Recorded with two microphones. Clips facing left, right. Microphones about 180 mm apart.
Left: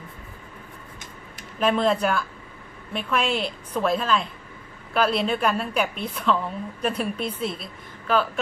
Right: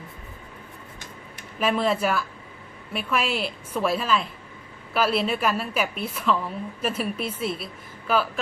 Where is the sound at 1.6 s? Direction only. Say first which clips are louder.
Left 2 dB; 5° right (ahead or behind).